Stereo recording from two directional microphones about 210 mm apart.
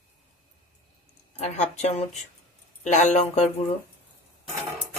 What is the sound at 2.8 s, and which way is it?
Speech, 35° left (ahead or behind).